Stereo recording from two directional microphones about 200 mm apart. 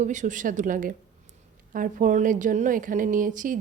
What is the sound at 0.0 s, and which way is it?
A woman's voice, 40° right (ahead or behind).